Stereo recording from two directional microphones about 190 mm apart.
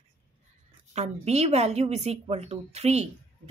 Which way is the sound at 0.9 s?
35° right (ahead or behind).